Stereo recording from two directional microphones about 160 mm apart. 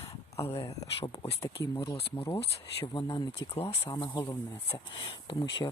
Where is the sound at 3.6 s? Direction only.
40° left (ahead or behind).